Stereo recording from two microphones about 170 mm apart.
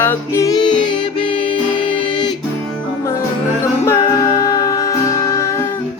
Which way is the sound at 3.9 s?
20° left (ahead or behind).